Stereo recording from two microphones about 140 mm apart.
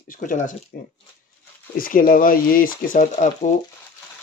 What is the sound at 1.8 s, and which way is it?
Speech, 85° left.